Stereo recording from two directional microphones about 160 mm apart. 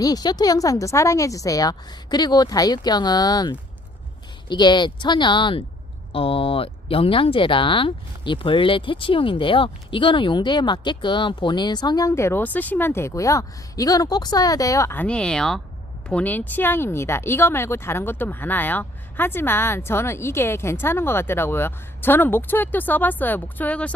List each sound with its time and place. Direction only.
0.0 s speech: 25° left (ahead or behind); by 23.9 s 10° left (ahead or behind)